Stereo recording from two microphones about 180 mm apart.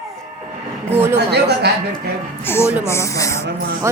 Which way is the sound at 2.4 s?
15° left (ahead or behind).